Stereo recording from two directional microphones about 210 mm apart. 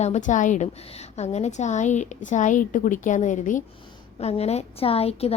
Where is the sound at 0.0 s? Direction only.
35° left (ahead or behind).